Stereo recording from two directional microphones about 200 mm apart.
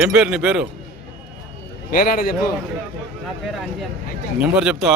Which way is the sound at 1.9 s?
45° left (ahead or behind).